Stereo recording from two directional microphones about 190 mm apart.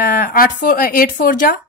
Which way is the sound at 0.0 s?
50° left (ahead or behind).